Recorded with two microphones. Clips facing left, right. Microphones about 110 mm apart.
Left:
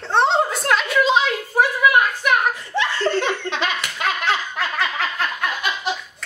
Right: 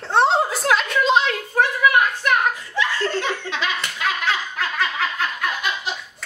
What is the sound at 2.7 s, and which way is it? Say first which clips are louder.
Laughter: left 2 dB; 65° left (ahead or behind).